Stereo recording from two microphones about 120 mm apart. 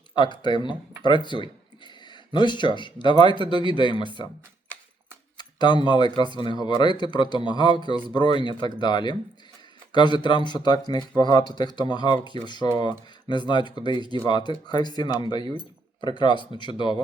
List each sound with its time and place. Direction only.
0.1 s speech: 40° left (ahead or behind)
5.4 s speech: 40° left (ahead or behind)